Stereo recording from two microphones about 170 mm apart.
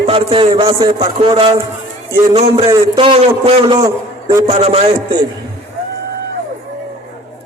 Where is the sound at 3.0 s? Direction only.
30° right (ahead or behind).